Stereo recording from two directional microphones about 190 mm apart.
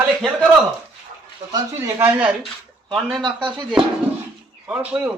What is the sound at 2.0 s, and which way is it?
Speech, 10° right (ahead or behind).